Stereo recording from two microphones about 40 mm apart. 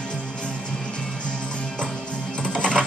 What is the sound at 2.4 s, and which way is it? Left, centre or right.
Music, left.